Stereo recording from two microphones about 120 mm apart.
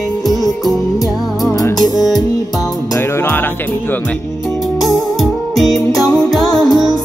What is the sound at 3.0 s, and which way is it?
Music, 20° left (ahead or behind).